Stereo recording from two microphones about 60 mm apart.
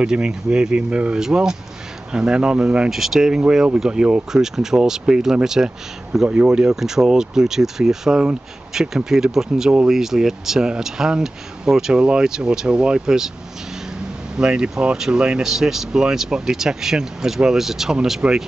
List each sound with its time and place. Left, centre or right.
0.0 s speech: centre
2.9 s speech: centre
14.3 s speech: centre
18.2 s speech: right